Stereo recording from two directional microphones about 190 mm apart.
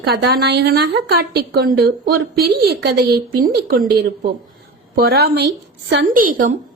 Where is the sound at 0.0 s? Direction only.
60° right (ahead or behind).